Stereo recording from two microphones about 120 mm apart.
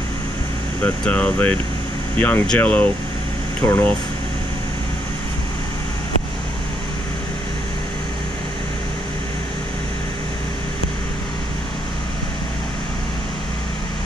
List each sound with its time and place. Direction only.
0.8 s speech: 10° left (ahead or behind)